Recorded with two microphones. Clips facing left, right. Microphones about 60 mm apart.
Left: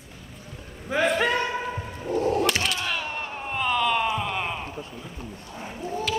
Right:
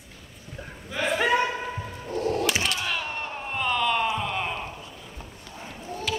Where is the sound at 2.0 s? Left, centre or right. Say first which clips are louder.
Left 3 dB; centre.